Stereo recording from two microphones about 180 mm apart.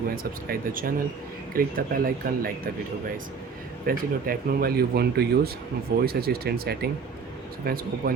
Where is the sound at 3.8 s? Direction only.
55° right (ahead or behind).